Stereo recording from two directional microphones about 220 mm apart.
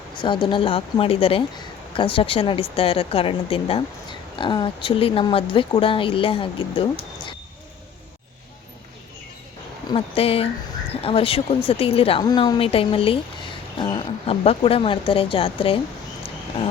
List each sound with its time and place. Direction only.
0.2 s speech: 20° left (ahead or behind)
9.9 s speech: 25° left (ahead or behind)